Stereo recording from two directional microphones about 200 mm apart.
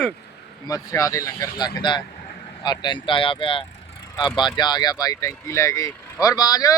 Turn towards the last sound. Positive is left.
turn(degrees=20)  # may be behind; listen again after turning